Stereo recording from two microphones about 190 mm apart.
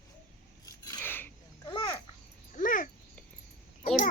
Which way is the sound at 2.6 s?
45° left (ahead or behind).